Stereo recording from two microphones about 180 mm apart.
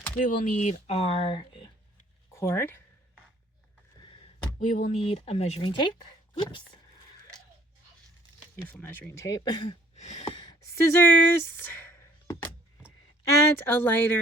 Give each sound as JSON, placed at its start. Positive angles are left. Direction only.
{"t": 0.2, "sound": "speech", "side_deg": 45}
{"t": 2.3, "sound": "speech", "side_deg": 15}
{"t": 4.6, "sound": "speech", "side_deg": 40}
{"t": 8.6, "sound": "speech", "side_deg": 10}
{"t": 9.9, "sound": "a sound", "side_deg": 35}
{"t": 10.2, "sound": "a sound", "side_deg": 20}
{"t": 13.6, "sound": "speech", "side_deg": 10}